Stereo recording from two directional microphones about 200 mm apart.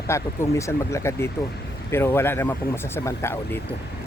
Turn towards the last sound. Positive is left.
turn(degrees=15)  # may be behind; listen again after turning